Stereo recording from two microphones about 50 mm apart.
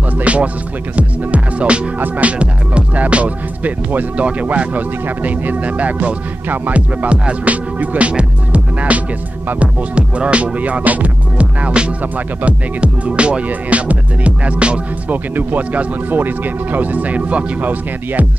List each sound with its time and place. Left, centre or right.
0.2 s music: right
2.0 s speech: right
7.1 s music: right
15.3 s speech: right